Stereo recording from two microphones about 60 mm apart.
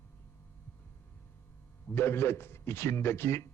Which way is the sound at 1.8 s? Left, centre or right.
Left.